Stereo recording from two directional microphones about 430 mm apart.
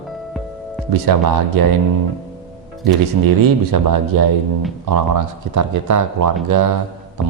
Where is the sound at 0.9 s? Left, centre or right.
Right.